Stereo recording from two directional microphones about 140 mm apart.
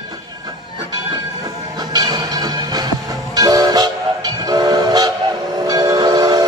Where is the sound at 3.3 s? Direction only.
30° right (ahead or behind).